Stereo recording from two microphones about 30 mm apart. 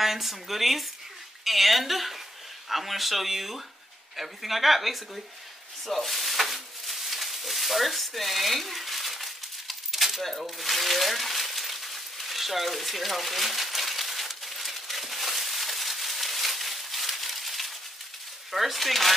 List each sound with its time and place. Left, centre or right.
0.0 s a woman's voice: centre
5.9 s a sound: centre
18.5 s a woman's voice: centre